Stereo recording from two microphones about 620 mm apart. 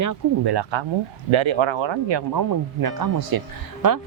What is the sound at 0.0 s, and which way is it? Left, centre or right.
Speech, right.